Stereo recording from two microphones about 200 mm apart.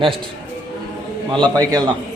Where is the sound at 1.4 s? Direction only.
20° right (ahead or behind).